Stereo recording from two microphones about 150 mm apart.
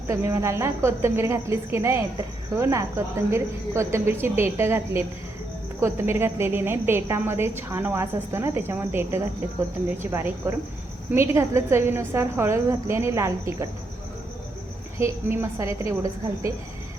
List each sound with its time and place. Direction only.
0.1 s a woman's voice: 20° right (ahead or behind)
14.9 s a woman's voice: 15° right (ahead or behind)